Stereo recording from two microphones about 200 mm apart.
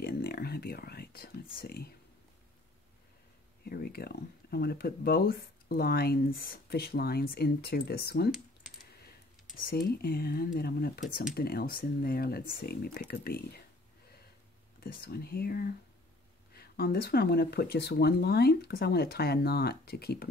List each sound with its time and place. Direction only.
0.0 s whispering: 50° left (ahead or behind)
3.6 s speech: 50° left (ahead or behind)
9.7 s speech: 50° left (ahead or behind)
14.8 s speech: 50° left (ahead or behind)